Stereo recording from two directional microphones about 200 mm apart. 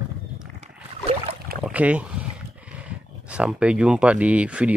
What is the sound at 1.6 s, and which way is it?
Speech, 5° right (ahead or behind).